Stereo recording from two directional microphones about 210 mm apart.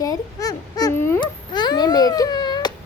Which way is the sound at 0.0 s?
15° left (ahead or behind).